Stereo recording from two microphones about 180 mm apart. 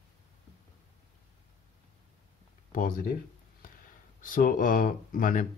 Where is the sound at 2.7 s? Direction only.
50° left (ahead or behind).